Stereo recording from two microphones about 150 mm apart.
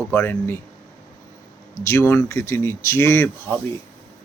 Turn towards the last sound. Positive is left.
turn(degrees=15)  # may be behind; listen again after turning